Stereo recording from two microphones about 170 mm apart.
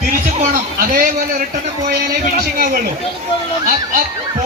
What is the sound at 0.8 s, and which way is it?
A man's voice, 50° right (ahead or behind).